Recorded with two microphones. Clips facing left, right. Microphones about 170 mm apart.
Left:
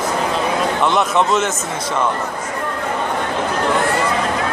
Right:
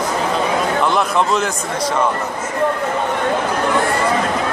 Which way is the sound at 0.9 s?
Centre (ahead or behind).